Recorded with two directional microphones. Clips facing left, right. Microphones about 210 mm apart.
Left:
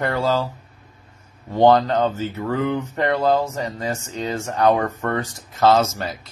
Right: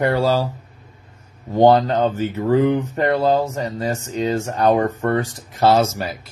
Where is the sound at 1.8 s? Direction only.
15° right (ahead or behind).